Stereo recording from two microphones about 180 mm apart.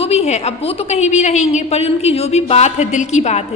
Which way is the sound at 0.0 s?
35° left (ahead or behind).